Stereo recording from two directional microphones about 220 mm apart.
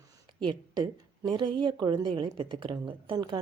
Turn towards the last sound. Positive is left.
turn(degrees=-20)  # may be behind; listen again after turning